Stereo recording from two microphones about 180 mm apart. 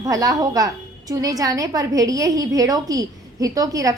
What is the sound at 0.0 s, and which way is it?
A woman's voice, 20° right (ahead or behind).